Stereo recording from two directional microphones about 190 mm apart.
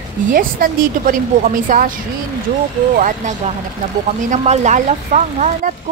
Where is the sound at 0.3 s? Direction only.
45° right (ahead or behind).